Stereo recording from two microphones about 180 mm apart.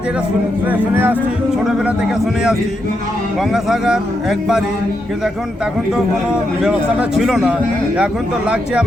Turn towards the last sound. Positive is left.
turn(degrees=-5)  # may be behind; listen again after turning